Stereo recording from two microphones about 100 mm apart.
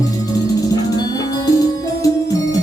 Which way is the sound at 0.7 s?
40° left (ahead or behind).